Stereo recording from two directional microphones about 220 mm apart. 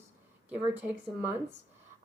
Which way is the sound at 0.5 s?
5° right (ahead or behind).